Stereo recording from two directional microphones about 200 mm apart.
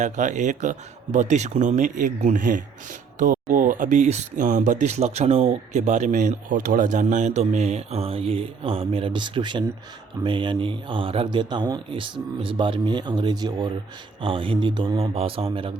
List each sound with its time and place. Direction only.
0.0 s speech: 35° right (ahead or behind)